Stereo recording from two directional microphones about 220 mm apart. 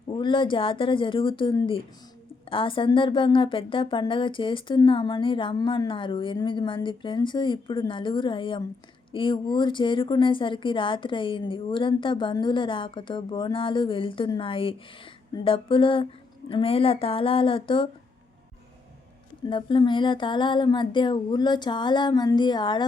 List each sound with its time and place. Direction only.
0.2 s a woman's voice: 20° left (ahead or behind)
19.5 s a woman's voice: 20° left (ahead or behind)